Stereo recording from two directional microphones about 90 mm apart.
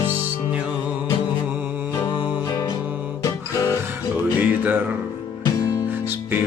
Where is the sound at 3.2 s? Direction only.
40° left (ahead or behind).